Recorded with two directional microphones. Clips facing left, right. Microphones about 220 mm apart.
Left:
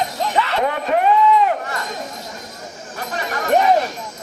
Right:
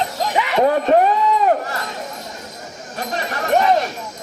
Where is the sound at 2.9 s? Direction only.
30° right (ahead or behind).